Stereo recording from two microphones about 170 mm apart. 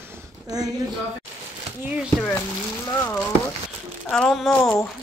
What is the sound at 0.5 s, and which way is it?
Speech, 20° right (ahead or behind).